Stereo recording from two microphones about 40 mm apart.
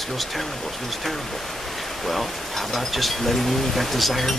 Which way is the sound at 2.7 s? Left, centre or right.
Centre.